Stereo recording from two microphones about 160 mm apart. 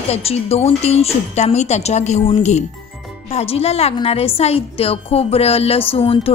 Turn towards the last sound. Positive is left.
turn(degrees=35)  # may be behind; listen again after turning